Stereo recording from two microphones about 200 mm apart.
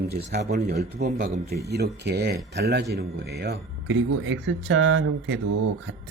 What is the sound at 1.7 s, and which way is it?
A man's voice, 55° right (ahead or behind).